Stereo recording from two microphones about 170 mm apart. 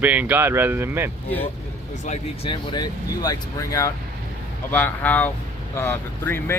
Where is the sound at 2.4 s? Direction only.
25° left (ahead or behind).